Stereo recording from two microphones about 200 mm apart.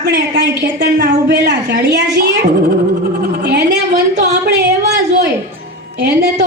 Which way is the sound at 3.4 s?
55° right (ahead or behind).